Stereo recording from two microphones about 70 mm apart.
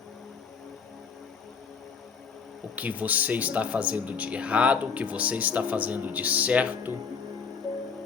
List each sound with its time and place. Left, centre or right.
2.7 s speech: right